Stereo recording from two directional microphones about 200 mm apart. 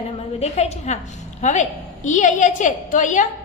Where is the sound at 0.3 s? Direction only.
35° left (ahead or behind).